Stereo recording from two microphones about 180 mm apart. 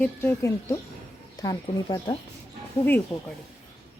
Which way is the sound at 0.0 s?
10° left (ahead or behind).